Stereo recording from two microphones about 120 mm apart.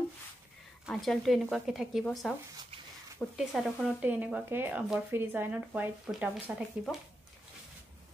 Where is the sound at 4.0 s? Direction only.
10° right (ahead or behind).